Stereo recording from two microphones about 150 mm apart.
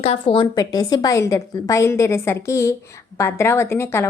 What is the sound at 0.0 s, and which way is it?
Speech, 40° left (ahead or behind).